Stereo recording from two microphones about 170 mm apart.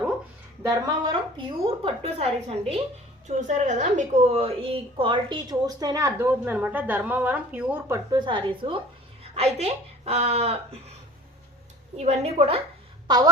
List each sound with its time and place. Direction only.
0.6 s a woman's voice: 20° right (ahead or behind)
1.6 s a woman's voice: 30° right (ahead or behind); by 7.9 s 10° right (ahead or behind)
8.1 s a woman's voice: 25° right (ahead or behind)
11.9 s speech: 40° right (ahead or behind)